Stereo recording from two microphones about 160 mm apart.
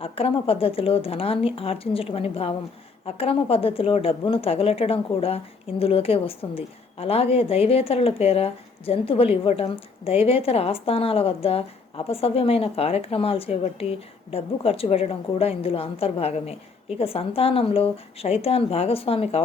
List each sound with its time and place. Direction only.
0.0 s speech: 35° left (ahead or behind)